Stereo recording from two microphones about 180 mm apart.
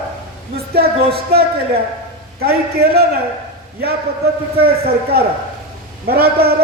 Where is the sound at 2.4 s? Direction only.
60° right (ahead or behind).